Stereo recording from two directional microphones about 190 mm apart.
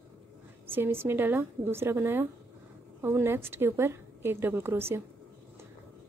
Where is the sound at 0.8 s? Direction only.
10° right (ahead or behind).